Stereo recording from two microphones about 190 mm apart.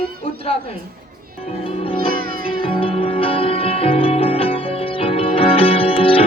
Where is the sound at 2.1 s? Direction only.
50° right (ahead or behind).